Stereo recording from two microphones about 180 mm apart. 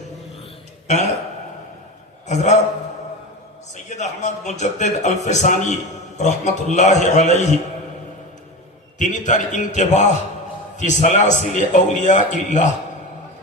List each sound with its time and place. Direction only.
2.2 s a man's voice: 40° left (ahead or behind)
3.9 s a man's voice: 40° left (ahead or behind)
9.0 s a man's voice: 45° left (ahead or behind)